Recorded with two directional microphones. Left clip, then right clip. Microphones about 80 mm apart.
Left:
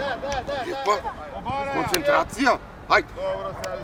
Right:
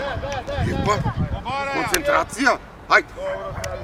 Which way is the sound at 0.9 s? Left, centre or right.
Right.